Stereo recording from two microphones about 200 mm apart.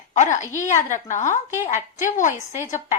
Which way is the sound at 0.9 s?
40° left (ahead or behind).